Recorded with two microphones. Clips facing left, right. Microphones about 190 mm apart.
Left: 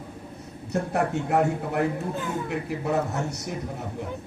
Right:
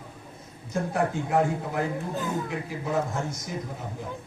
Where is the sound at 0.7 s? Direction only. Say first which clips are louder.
Left 1 dB; 70° left (ahead or behind).